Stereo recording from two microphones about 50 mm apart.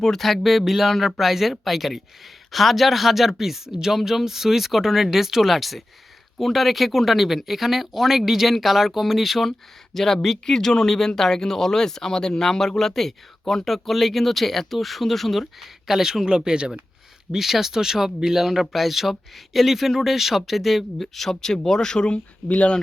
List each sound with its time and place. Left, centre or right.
0.0 s speech: centre
15.9 s speech: centre; by 22.7 s left